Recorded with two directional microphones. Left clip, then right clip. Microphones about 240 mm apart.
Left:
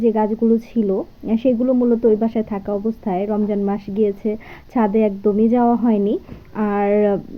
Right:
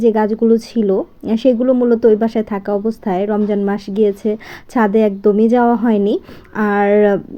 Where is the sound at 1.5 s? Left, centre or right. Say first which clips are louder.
Right 4 dB; right.